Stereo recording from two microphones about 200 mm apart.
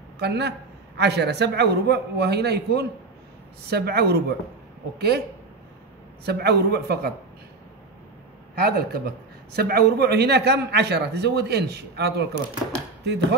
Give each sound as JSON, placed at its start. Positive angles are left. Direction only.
{"t": 0.2, "sound": "a man's voice", "side_deg": -55}
{"t": 6.2, "sound": "a man's voice", "side_deg": -55}
{"t": 8.5, "sound": "a man's voice", "side_deg": -50}